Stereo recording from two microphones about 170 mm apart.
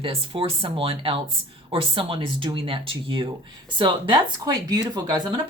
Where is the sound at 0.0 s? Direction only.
30° right (ahead or behind).